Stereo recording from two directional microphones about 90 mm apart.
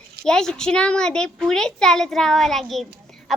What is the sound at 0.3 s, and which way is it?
A woman's voice, 5° left (ahead or behind).